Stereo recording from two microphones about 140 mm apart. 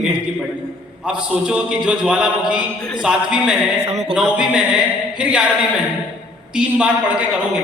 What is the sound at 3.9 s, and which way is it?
Speech, 50° right (ahead or behind).